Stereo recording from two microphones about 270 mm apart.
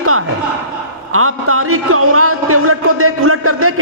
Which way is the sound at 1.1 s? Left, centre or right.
Right.